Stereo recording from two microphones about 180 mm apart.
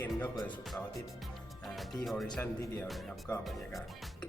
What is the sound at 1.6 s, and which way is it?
Music, centre (ahead or behind).